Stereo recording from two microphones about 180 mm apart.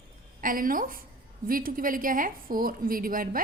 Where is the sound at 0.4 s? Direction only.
50° right (ahead or behind).